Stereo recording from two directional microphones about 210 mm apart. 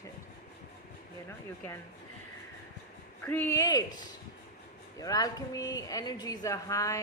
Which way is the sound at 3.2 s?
10° left (ahead or behind).